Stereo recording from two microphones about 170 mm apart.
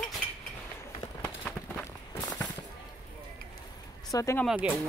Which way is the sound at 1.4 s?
15° left (ahead or behind).